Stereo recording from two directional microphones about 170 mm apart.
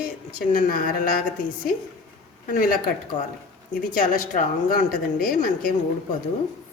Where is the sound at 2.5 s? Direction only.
50° left (ahead or behind).